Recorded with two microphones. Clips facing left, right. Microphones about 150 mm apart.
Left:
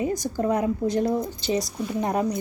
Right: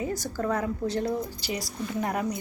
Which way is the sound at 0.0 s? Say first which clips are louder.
Left 5 dB; 15° left (ahead or behind).